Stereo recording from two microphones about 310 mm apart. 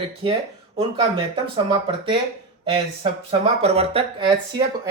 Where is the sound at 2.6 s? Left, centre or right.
Centre.